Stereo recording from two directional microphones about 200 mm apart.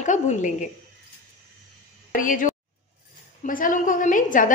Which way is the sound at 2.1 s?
40° left (ahead or behind).